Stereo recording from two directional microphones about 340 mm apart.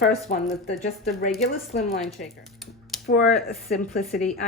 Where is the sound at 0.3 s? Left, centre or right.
Left.